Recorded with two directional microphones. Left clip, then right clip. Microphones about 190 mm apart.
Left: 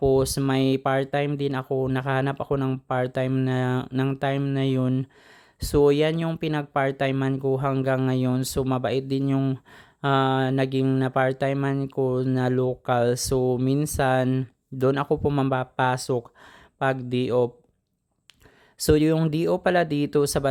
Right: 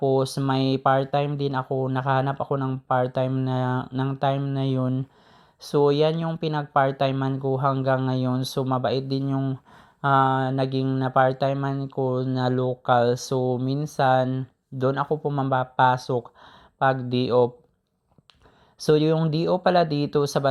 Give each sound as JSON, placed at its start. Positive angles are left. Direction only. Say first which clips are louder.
{"t": 0.0, "sound": "speech", "louder": "left 1 dB", "side_deg": 20}
{"t": 15.5, "sound": "speech", "louder": "right 4 dB", "side_deg": 15}
{"t": 18.8, "sound": "speech", "louder": "even", "side_deg": 20}